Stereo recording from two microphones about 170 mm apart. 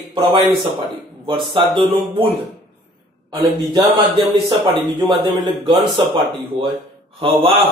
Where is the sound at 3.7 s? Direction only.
30° right (ahead or behind).